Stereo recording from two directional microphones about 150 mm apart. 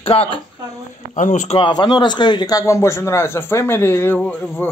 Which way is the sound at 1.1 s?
55° left (ahead or behind).